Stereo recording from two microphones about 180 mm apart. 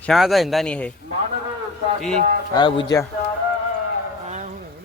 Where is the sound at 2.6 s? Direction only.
25° left (ahead or behind).